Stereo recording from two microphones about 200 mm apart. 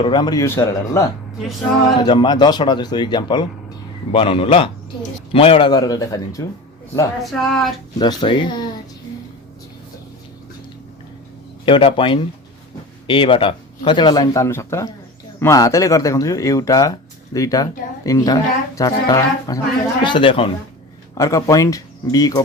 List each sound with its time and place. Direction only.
0.0 s speech: 20° left (ahead or behind)
1.4 s speech: centre (ahead or behind)
2.0 s speech: 20° left (ahead or behind)
7.2 s speech: centre (ahead or behind)
7.9 s speech: 20° left (ahead or behind)
11.6 s speech: 25° left (ahead or behind)